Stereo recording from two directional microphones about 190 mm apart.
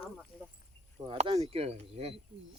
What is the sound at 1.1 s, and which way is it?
Speech, 30° right (ahead or behind).